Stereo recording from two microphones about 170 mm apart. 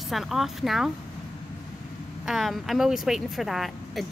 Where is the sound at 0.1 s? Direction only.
Centre (ahead or behind).